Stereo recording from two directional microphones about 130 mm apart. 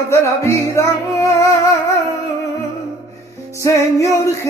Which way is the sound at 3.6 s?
25° left (ahead or behind).